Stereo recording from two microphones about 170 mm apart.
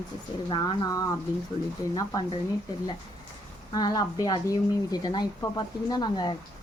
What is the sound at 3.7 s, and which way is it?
Speech, 25° left (ahead or behind).